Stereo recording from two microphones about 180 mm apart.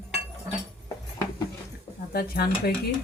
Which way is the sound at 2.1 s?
60° left (ahead or behind).